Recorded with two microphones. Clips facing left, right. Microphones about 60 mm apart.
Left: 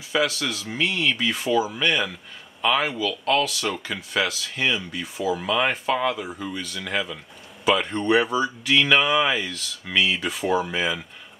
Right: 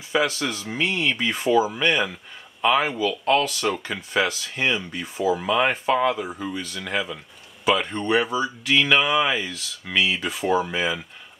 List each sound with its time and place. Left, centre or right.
0.1 s speech: centre
4.9 s speech: right
5.4 s speech: centre